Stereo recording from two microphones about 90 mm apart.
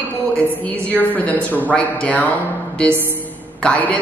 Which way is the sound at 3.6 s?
15° left (ahead or behind).